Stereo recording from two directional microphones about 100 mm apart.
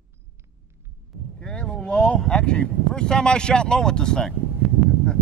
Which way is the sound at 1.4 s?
10° left (ahead or behind).